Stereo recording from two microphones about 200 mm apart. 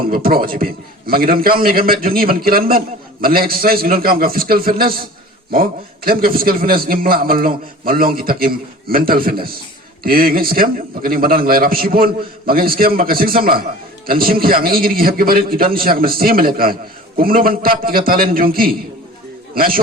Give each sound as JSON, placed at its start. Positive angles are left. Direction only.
{"t": 0.1, "sound": "a man's voice", "side_deg": -45}
{"t": 6.1, "sound": "a man's voice", "side_deg": -45}